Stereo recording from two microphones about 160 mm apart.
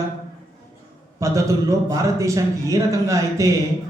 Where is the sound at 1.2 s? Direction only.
20° right (ahead or behind).